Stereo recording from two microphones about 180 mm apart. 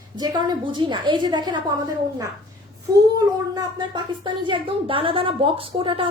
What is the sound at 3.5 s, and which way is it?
Speech, 25° right (ahead or behind).